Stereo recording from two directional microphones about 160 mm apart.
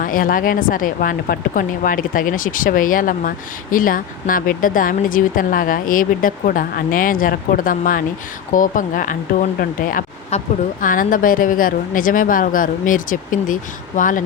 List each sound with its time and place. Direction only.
0.0 s speech: 60° left (ahead or behind)